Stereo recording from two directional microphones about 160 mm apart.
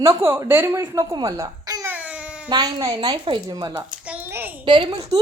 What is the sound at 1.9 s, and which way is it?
Baby cry, 10° right (ahead or behind).